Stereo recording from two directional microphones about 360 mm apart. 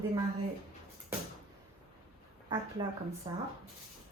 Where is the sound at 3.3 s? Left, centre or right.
Centre.